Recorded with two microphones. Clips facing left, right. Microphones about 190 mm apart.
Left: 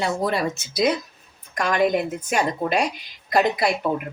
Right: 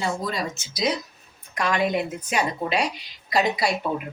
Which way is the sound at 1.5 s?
45° left (ahead or behind).